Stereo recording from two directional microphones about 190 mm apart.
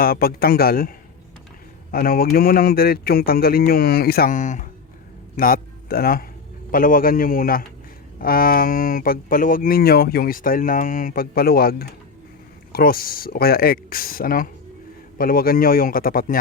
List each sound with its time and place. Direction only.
0.0 s a man's voice: 50° left (ahead or behind)